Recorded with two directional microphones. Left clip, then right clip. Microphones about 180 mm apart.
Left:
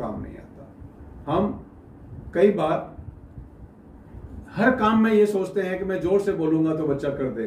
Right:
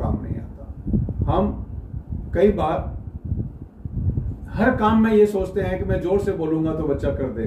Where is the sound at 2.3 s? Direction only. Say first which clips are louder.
Right 1 dB; 5° left (ahead or behind).